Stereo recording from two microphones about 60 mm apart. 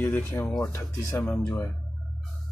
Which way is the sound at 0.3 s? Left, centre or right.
Left.